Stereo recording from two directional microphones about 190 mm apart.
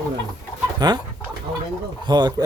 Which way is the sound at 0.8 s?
20° right (ahead or behind).